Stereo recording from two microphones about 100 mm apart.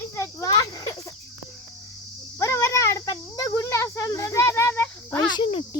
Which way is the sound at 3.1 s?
40° left (ahead or behind).